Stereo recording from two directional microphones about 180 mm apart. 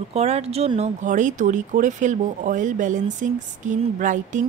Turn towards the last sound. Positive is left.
turn(degrees=-45)  # may be behind; listen again after turning